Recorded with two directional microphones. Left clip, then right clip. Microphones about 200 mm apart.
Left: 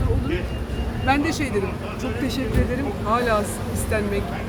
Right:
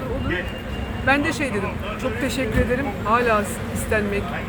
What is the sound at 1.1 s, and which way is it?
Speech, 15° left (ahead or behind).